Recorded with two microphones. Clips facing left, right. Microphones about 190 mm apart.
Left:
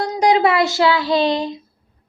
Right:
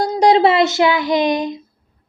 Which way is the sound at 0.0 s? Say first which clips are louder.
Right 3 dB; 30° right (ahead or behind).